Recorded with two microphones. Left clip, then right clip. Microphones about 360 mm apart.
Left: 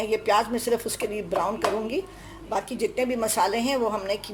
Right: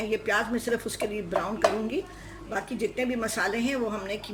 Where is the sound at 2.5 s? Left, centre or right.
Centre.